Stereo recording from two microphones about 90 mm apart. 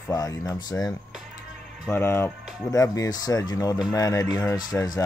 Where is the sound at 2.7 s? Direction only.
40° left (ahead or behind).